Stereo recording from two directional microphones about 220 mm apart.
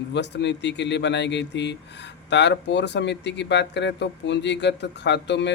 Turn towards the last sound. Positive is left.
turn(degrees=50)  # may be behind; listen again after turning